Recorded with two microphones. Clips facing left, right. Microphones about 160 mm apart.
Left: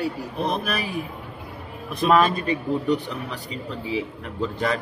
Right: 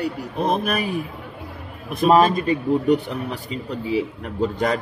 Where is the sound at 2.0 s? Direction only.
40° right (ahead or behind).